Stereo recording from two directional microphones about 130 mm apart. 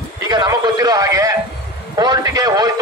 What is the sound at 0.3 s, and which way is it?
A man's voice, 30° right (ahead or behind).